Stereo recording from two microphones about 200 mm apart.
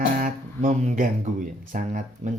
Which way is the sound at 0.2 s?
40° right (ahead or behind).